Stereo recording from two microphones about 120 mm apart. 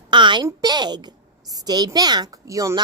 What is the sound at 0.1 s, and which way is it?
A woman's voice, 40° right (ahead or behind).